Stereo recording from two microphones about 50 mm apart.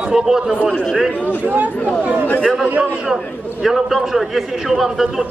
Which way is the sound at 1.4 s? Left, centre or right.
Right.